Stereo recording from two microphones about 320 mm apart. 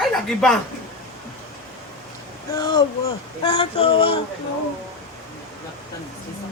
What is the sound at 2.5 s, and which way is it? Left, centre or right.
Speech, centre.